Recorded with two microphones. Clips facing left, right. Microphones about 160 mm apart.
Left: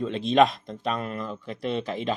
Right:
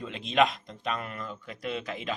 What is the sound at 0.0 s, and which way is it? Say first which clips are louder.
Speech: left 5 dB; 35° left (ahead or behind).